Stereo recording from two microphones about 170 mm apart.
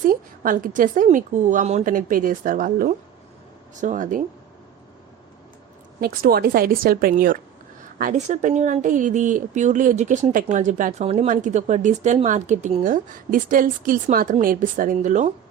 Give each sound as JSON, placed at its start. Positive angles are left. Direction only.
{"t": 0.0, "sound": "speech", "side_deg": -55}
{"t": 6.0, "sound": "speech", "side_deg": -65}